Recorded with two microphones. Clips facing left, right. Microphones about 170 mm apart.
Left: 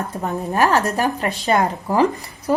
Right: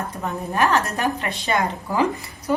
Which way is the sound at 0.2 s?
40° left (ahead or behind).